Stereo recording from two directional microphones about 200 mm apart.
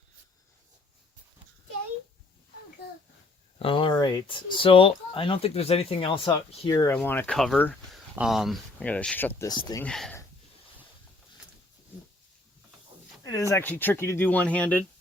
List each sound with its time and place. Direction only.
3.6 s speech: 25° left (ahead or behind)
6.7 s speech: 15° left (ahead or behind)
9.5 s speech: 20° left (ahead or behind)
9.8 s speech: 5° left (ahead or behind)
13.5 s speech: 10° left (ahead or behind)